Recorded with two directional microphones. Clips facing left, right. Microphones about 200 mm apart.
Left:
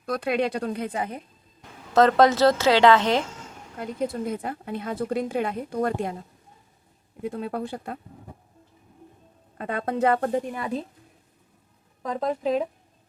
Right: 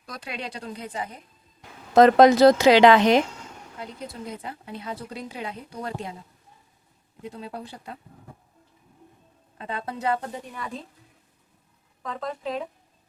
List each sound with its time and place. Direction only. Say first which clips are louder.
0.0 s speech: left 11 dB; 55° left (ahead or behind)
1.9 s speech: right 3 dB; 15° right (ahead or behind)
3.8 s speech: left 9 dB; 50° left (ahead or behind)
7.2 s speech: left 7 dB; 55° left (ahead or behind)
9.6 s speech: left 7 dB; 55° left (ahead or behind)
12.0 s speech: left 6 dB; 40° left (ahead or behind)